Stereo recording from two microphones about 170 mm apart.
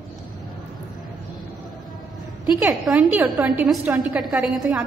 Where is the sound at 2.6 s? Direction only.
10° right (ahead or behind).